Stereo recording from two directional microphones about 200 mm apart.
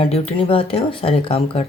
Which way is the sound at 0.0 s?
30° left (ahead or behind).